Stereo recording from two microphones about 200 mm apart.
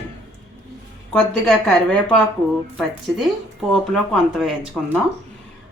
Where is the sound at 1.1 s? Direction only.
5° left (ahead or behind).